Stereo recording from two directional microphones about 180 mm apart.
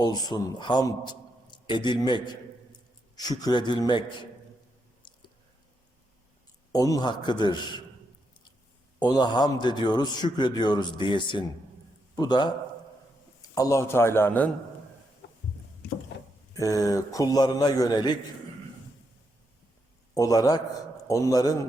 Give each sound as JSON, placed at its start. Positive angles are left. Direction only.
{"t": 0.0, "sound": "a man's voice", "side_deg": 20}
{"t": 5.0, "sound": "a sound", "side_deg": 25}
{"t": 6.7, "sound": "a man's voice", "side_deg": 20}
{"t": 9.0, "sound": "a man's voice", "side_deg": 20}
{"t": 16.6, "sound": "a man's voice", "side_deg": 20}
{"t": 20.1, "sound": "a man's voice", "side_deg": 20}